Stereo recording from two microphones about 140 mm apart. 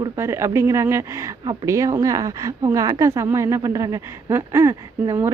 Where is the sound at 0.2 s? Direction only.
20° right (ahead or behind).